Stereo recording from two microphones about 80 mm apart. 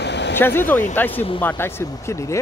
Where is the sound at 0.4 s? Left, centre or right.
Left.